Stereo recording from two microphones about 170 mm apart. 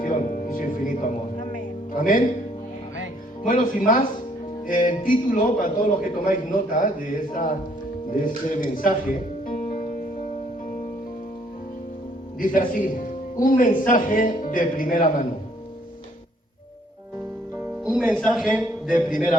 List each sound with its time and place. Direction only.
0.0 s music: 55° left (ahead or behind)
4.6 s a man's voice: 50° left (ahead or behind)
9.6 s music: 45° left (ahead or behind)
12.4 s a man's voice: 55° left (ahead or behind)
17.8 s speech: centre (ahead or behind)
18.5 s a sound: 5° right (ahead or behind)